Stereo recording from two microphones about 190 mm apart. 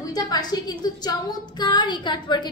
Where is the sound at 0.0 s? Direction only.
20° left (ahead or behind).